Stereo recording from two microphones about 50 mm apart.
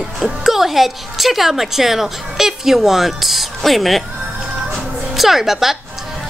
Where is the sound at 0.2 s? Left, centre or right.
Centre.